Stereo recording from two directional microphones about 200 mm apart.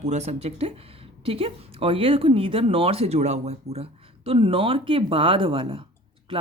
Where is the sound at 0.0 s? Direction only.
35° right (ahead or behind).